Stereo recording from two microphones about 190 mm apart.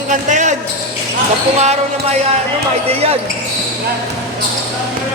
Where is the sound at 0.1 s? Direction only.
40° right (ahead or behind).